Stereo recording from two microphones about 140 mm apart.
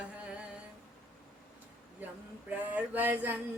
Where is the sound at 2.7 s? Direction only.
10° right (ahead or behind).